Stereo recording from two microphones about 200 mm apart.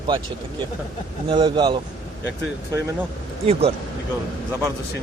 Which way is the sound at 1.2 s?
25° right (ahead or behind).